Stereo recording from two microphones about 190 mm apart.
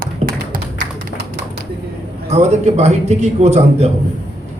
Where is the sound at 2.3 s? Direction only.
35° right (ahead or behind).